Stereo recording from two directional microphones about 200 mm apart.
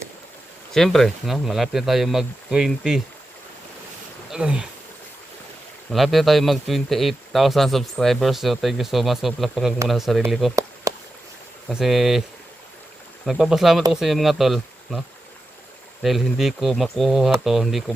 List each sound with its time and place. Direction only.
0.7 s a man's voice: centre (ahead or behind)
4.3 s speech: 5° right (ahead or behind)
5.9 s a man's voice: centre (ahead or behind)
10.5 s chop: 15° right (ahead or behind)
11.7 s a man's voice: centre (ahead or behind)
13.2 s a man's voice: centre (ahead or behind)
16.0 s a man's voice: centre (ahead or behind)